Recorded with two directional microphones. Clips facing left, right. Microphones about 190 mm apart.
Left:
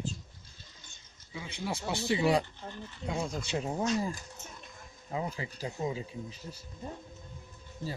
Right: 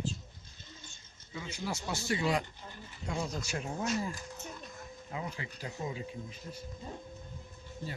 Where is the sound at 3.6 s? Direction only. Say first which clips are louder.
Left 4 dB; 30° left (ahead or behind).